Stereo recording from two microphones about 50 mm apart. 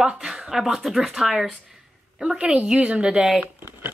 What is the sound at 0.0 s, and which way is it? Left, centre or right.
Speech, centre.